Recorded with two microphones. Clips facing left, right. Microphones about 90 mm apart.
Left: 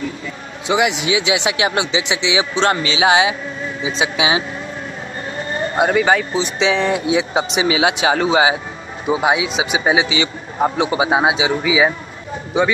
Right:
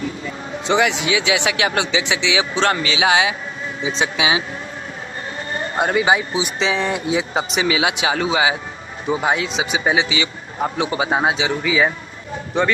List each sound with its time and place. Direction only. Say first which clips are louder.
0.7 s speech: left 1 dB; 15° left (ahead or behind)
3.8 s speech: left 1 dB; 5° left (ahead or behind)
5.8 s speech: left 3 dB; centre (ahead or behind)
6.0 s speech: left 2 dB; 10° right (ahead or behind)
6.6 s speech: left 5 dB; centre (ahead or behind)
7.6 s speech: left 4 dB; 30° left (ahead or behind)
9.0 s speech: left 3 dB; 15° left (ahead or behind)
11.1 s speech: left 3 dB; 15° left (ahead or behind)